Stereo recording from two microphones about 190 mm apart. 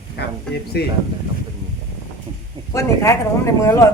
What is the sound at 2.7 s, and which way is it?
Speech, 15° left (ahead or behind).